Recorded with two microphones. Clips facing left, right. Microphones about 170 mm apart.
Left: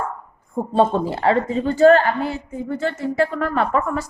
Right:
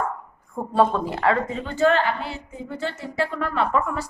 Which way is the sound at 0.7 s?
25° left (ahead or behind).